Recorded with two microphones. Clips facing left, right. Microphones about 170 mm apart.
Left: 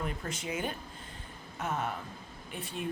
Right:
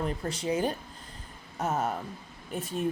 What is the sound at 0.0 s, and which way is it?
A woman's voice, 35° right (ahead or behind).